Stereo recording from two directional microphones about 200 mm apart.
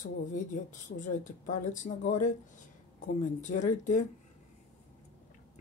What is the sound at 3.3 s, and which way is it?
Speech, 35° left (ahead or behind).